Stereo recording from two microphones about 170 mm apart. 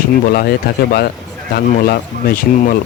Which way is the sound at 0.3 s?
60° left (ahead or behind).